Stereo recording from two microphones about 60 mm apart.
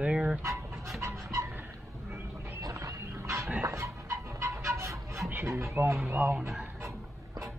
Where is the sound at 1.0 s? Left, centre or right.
Right.